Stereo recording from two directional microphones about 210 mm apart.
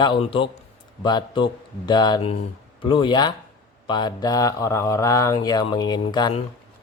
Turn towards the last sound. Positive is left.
turn(degrees=20)  # may be behind; listen again after turning